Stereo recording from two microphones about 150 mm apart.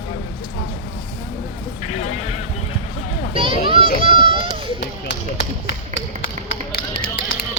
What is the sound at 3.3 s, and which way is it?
Speech, 35° right (ahead or behind).